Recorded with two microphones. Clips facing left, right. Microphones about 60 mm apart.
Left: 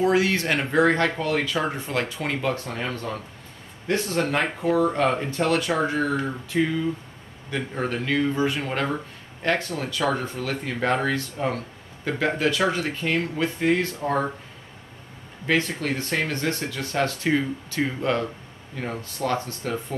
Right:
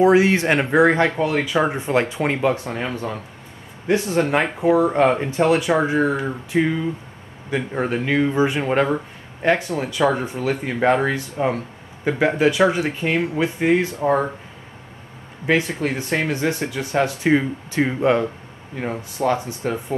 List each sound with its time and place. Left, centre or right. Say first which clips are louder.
0.0 s speech: right 6 dB; right
15.4 s speech: right 4 dB; centre